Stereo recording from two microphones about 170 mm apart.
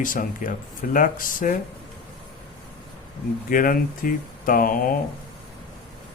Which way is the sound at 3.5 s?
55° left (ahead or behind).